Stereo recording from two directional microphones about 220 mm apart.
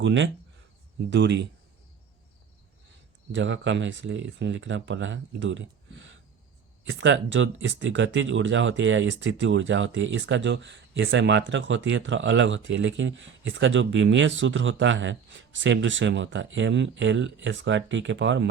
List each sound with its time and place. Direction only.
0.0 s speech: 55° right (ahead or behind)
3.3 s speech: 55° right (ahead or behind)